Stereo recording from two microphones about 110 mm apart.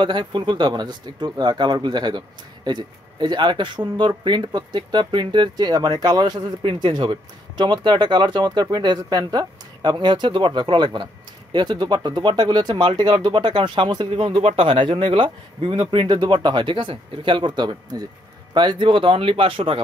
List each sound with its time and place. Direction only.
0.0 s speech: 45° right (ahead or behind)
6.6 s speech: 50° right (ahead or behind)